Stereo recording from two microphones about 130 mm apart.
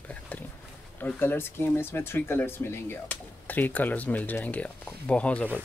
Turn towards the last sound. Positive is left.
turn(degrees=10)  # may be behind; listen again after turning